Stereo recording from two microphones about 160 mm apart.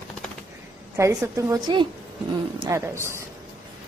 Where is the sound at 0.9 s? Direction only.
15° right (ahead or behind).